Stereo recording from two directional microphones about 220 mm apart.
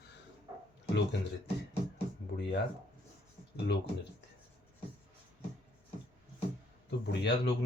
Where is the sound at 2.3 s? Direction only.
45° left (ahead or behind).